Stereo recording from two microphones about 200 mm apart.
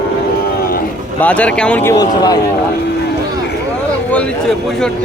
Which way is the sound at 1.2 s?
5° left (ahead or behind).